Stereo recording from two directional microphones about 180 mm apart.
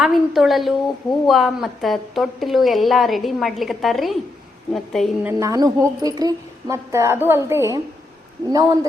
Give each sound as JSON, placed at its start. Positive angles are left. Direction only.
{"t": 0.0, "sound": "a woman's voice", "side_deg": 0}
{"t": 5.2, "sound": "a woman's voice", "side_deg": -20}